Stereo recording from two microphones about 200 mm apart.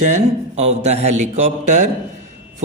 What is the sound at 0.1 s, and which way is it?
Speech, 35° right (ahead or behind).